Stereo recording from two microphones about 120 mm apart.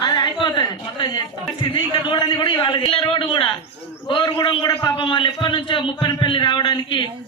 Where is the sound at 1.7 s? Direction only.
40° left (ahead or behind).